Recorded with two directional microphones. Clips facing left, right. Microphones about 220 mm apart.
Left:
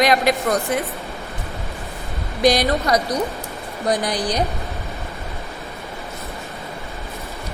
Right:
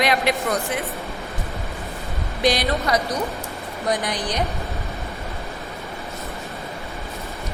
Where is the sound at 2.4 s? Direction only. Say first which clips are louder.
Left 4 dB; 40° left (ahead or behind).